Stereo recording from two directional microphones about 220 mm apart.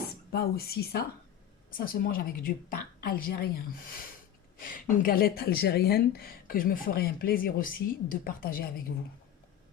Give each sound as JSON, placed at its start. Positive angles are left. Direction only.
{"t": 0.3, "sound": "speech", "side_deg": 45}
{"t": 4.6, "sound": "speech", "side_deg": 40}